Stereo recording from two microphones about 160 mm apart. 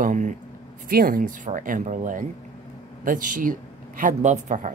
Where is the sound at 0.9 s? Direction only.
65° right (ahead or behind).